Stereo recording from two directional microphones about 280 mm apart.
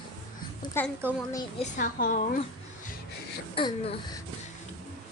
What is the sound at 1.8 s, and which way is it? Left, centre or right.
Speech, left.